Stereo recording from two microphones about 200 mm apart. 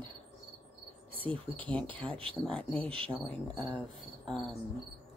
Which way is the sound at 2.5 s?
5° left (ahead or behind).